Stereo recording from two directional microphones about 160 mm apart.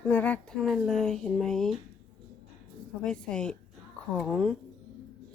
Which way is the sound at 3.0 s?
5° left (ahead or behind).